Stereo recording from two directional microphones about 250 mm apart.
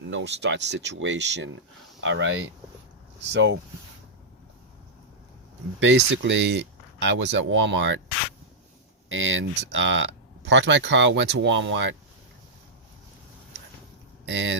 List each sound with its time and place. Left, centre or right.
0.1 s speech: right
5.8 s speech: right
9.0 s speech: right
14.3 s speech: right